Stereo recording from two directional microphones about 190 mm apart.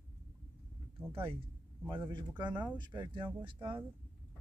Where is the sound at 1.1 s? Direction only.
30° right (ahead or behind).